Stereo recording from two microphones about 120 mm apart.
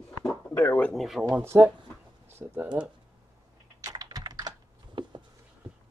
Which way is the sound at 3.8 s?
30° right (ahead or behind).